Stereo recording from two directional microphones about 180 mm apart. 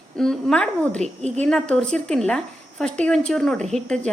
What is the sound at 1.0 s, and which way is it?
Speech, 40° right (ahead or behind).